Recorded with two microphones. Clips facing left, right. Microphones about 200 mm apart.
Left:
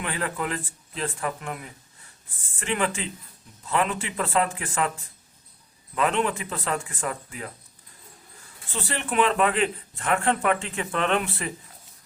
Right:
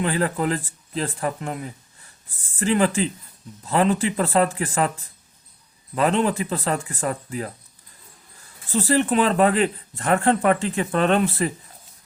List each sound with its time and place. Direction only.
0.0 s speech: 35° right (ahead or behind)
5.9 s speech: 35° right (ahead or behind)
8.7 s speech: 35° right (ahead or behind)